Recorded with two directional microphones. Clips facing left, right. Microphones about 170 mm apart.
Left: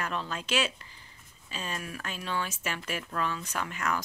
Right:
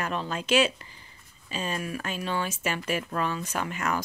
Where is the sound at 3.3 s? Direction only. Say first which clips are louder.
Right 4 dB; 20° right (ahead or behind).